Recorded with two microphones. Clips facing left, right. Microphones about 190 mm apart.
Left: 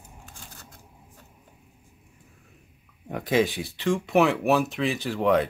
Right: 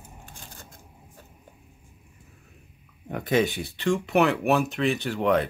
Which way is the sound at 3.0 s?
Centre (ahead or behind).